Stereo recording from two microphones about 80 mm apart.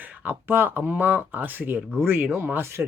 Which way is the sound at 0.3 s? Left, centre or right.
Right.